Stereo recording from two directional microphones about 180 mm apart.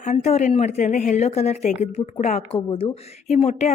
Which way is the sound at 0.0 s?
40° left (ahead or behind).